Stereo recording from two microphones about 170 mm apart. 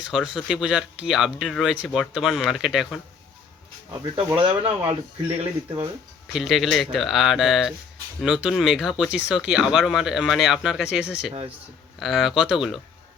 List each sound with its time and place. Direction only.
0.0 s speech: 5° right (ahead or behind)
4.4 s speech: 30° right (ahead or behind)
6.3 s speech: centre (ahead or behind)